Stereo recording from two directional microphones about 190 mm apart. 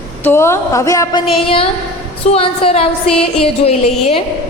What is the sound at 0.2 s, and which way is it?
A man's voice, 10° left (ahead or behind).